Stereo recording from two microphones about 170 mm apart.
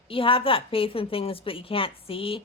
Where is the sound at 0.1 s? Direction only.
30° left (ahead or behind).